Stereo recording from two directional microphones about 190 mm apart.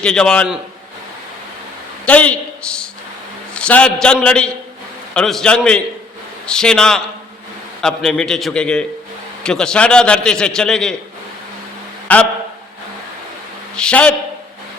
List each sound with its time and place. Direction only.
0.0 s a man's voice: 5° left (ahead or behind)
2.0 s a man's voice: 5° left (ahead or behind)
12.1 s a man's voice: 10° left (ahead or behind)
13.7 s a man's voice: 5° left (ahead or behind)